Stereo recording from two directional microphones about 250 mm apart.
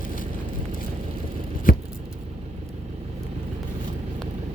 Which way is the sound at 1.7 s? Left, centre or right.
Left.